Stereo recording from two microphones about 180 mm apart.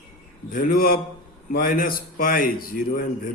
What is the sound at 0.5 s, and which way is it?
A man's voice, 55° left (ahead or behind).